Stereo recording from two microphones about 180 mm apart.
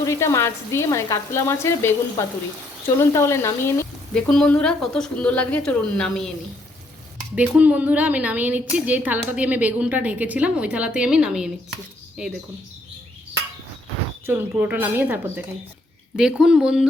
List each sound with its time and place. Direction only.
0.0 s speech: 15° left (ahead or behind)
7.3 s a woman's voice: 10° right (ahead or behind)
14.3 s a woman's voice: 15° right (ahead or behind)